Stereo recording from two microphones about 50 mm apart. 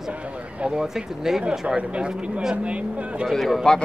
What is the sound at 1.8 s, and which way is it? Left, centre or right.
Speech, right.